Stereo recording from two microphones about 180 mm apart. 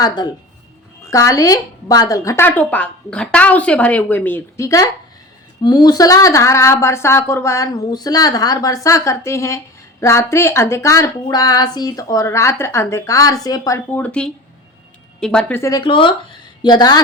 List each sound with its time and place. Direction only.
0.0 s a woman's voice: 20° left (ahead or behind)
15.8 s speech: 30° left (ahead or behind)